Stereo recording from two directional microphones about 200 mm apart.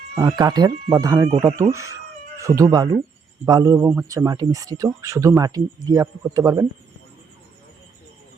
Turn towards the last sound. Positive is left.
turn(degrees=-15)  # may be behind; listen again after turning